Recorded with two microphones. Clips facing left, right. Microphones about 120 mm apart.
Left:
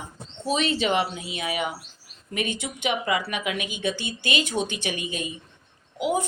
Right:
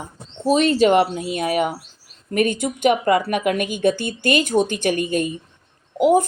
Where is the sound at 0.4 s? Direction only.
45° right (ahead or behind).